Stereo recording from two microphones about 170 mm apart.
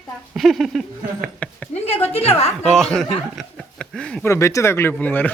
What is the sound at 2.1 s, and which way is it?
Speech, 35° left (ahead or behind).